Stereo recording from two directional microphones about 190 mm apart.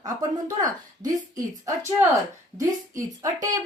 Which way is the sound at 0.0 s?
20° right (ahead or behind).